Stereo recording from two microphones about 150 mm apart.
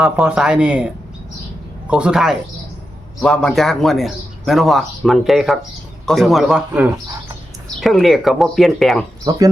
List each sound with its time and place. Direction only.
0.0 s a man's voice: 5° right (ahead or behind)
9.3 s speech: 25° right (ahead or behind)